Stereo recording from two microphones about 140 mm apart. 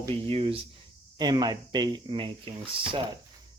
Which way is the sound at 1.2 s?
30° right (ahead or behind).